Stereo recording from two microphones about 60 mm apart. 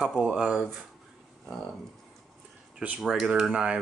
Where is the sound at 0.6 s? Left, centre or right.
Centre.